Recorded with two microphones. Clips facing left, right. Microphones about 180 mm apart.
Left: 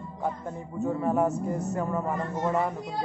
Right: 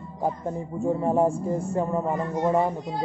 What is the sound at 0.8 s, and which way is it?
A man's voice, 30° right (ahead or behind).